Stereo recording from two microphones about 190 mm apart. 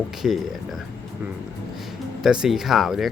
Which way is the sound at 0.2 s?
Centre (ahead or behind).